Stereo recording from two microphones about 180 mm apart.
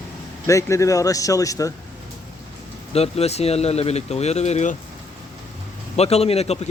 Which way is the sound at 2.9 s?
35° left (ahead or behind).